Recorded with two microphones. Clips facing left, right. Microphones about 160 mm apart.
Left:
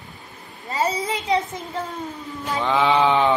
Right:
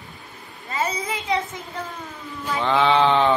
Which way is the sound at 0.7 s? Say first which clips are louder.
Left 3 dB; 40° left (ahead or behind).